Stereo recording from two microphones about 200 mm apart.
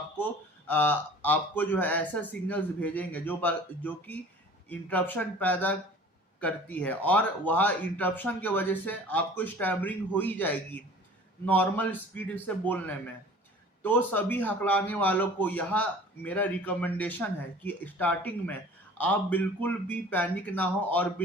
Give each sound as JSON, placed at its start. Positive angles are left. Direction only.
{"t": 0.7, "sound": "speech", "side_deg": 10}